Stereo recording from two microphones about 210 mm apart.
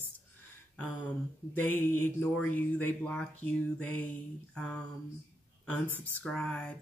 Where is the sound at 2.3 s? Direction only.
5° left (ahead or behind).